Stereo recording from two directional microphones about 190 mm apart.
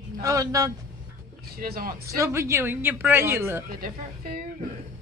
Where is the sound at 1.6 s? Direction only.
50° right (ahead or behind).